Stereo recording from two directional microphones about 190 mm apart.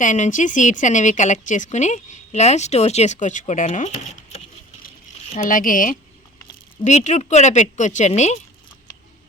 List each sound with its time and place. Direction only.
0.0 s a woman's voice: 40° left (ahead or behind)